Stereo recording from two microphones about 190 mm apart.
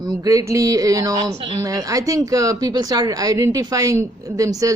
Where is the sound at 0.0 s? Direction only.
20° right (ahead or behind).